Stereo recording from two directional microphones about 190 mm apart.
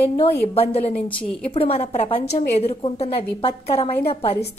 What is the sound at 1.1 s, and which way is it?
Speech, 5° left (ahead or behind).